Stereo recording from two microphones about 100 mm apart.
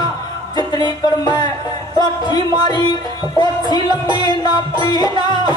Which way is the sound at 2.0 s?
45° left (ahead or behind).